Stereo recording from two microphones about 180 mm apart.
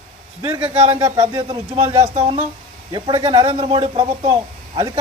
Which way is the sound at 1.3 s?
20° right (ahead or behind).